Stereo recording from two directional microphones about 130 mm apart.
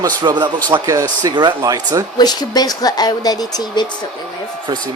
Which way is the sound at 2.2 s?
30° left (ahead or behind).